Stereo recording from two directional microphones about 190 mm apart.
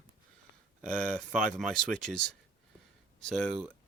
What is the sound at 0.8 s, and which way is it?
Speech, 5° left (ahead or behind).